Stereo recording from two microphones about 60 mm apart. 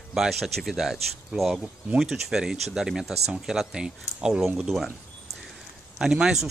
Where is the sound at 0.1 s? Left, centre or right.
Centre.